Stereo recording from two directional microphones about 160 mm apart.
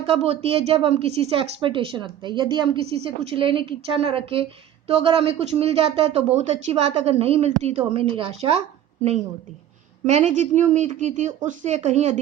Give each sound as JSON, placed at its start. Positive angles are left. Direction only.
{"t": 0.0, "sound": "a woman's voice", "side_deg": -40}
{"t": 10.1, "sound": "speech", "side_deg": -45}